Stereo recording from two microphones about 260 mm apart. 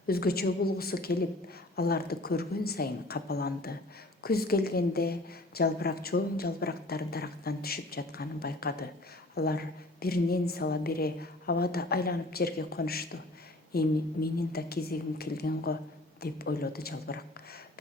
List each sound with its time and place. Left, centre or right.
0.1 s a woman's voice: left